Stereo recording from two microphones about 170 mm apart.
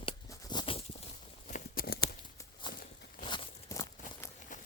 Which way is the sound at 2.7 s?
60° left (ahead or behind).